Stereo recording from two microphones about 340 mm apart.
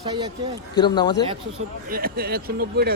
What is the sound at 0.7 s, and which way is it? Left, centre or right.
Speech, centre.